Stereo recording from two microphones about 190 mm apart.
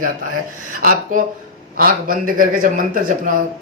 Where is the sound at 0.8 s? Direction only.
45° right (ahead or behind).